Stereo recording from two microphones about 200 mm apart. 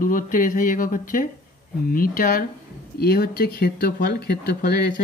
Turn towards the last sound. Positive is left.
turn(degrees=50)  # may be behind; listen again after turning